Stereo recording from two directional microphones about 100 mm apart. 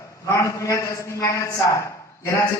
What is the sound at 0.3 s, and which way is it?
A man's voice, 30° left (ahead or behind).